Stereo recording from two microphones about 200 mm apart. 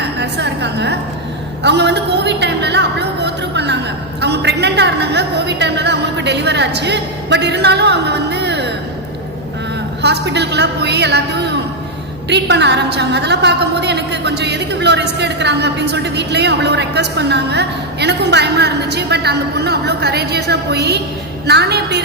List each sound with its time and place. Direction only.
0.0 s a woman's voice: 55° right (ahead or behind)
10.0 s a woman's voice: 60° right (ahead or behind)